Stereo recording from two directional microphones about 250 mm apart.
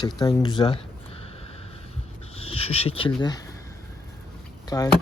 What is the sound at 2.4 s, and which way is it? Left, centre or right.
Speech, left.